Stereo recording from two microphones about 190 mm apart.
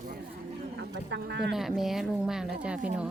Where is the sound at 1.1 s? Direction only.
65° right (ahead or behind).